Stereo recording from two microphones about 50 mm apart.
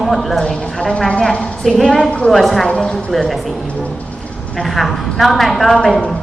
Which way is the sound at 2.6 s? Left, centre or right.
Centre.